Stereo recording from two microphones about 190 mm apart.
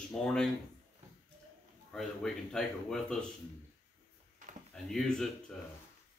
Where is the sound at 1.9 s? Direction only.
Centre (ahead or behind).